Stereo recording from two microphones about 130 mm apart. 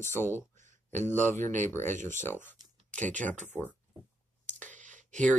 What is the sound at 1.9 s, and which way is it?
Speech, 70° right (ahead or behind).